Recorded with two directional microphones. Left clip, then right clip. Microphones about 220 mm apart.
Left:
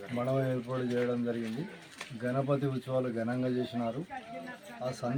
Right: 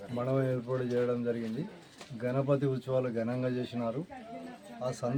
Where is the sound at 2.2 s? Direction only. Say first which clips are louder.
Right 1 dB; 15° right (ahead or behind).